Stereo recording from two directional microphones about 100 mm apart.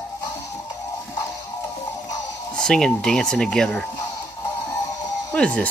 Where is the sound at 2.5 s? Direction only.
5° left (ahead or behind).